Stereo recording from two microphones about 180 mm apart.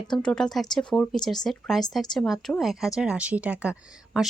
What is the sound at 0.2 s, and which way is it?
Speech, 5° left (ahead or behind).